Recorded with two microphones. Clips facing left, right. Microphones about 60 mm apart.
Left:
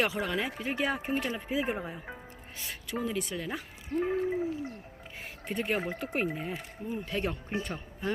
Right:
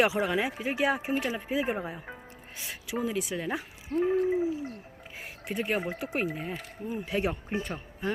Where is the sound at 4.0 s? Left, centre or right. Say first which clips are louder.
Right 4 dB; centre.